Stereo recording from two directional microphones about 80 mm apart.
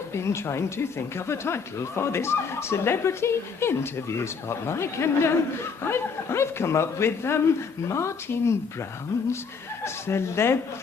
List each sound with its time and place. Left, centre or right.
0.1 s speech: left
9.8 s speech: left